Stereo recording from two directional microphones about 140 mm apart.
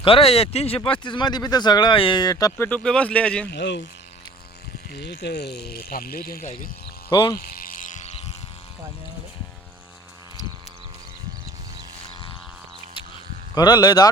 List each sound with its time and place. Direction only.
0.0 s speech: 40° left (ahead or behind)
0.9 s speech: 35° left (ahead or behind)
2.6 s speech: 5° left (ahead or behind)
5.7 s speech: 90° left
7.1 s speech: 30° left (ahead or behind)
7.3 s a sound: 90° left; by 8.1 s 65° left (ahead or behind)
13.5 s speech: 30° left (ahead or behind)